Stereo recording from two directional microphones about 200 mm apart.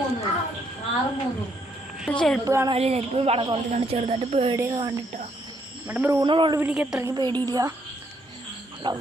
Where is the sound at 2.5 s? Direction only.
15° right (ahead or behind).